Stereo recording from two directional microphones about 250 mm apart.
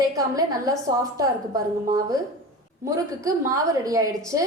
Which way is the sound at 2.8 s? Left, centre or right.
Centre.